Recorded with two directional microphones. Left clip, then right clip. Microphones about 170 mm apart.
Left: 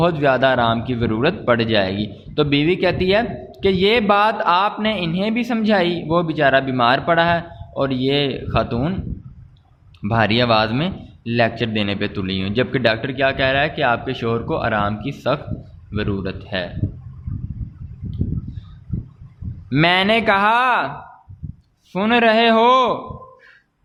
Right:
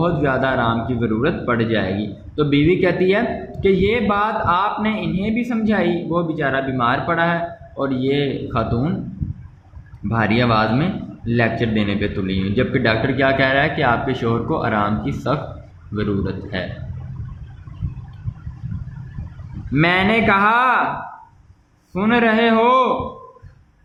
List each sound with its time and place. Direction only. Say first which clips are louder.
0.0 s a man's voice: left 3 dB; 60° left (ahead or behind)
10.1 s a man's voice: left 2 dB; 60° left (ahead or behind)
19.7 s speech: left 1 dB; 65° left (ahead or behind)
21.9 s a man's voice: left 2 dB; 65° left (ahead or behind)